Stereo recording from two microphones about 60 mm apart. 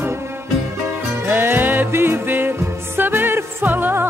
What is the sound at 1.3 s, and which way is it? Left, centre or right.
Music, right.